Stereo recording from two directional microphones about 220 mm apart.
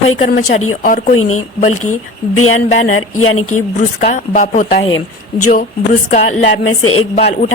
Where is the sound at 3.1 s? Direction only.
75° left (ahead or behind).